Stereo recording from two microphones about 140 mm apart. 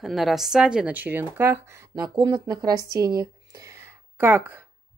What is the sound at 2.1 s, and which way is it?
Speech, 30° right (ahead or behind).